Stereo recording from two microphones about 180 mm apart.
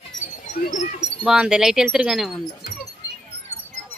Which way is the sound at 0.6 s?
40° left (ahead or behind).